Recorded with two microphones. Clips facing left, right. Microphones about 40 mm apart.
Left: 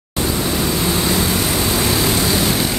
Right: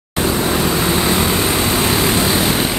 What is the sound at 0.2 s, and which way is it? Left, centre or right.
Vehicle, right.